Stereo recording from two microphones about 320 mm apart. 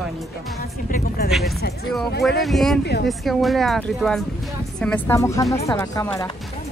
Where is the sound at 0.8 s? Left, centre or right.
Left.